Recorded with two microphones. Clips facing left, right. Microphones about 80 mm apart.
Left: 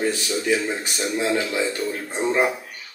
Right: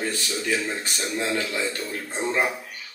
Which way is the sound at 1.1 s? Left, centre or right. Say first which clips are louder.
Left 4 dB; centre.